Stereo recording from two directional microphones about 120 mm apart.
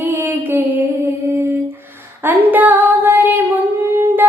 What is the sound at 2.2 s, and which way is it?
Female singing, 15° right (ahead or behind).